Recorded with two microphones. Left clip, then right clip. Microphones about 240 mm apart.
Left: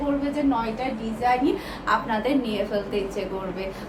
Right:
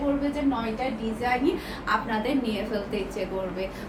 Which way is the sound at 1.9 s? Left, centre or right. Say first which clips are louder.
Left 3 dB; centre.